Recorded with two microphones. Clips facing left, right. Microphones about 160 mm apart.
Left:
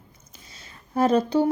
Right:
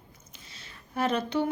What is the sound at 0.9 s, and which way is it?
Speech, 40° left (ahead or behind).